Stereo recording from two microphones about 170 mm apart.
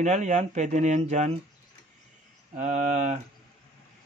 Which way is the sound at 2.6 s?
45° right (ahead or behind).